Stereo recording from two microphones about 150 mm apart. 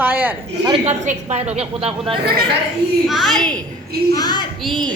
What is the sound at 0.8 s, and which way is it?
A woman's voice, 45° right (ahead or behind).